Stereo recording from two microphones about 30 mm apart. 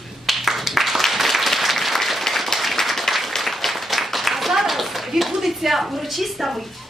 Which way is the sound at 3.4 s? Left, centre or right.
Centre.